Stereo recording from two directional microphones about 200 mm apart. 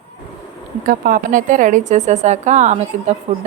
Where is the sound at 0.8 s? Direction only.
45° right (ahead or behind).